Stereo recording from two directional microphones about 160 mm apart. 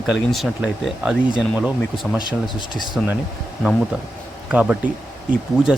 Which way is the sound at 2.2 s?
30° left (ahead or behind).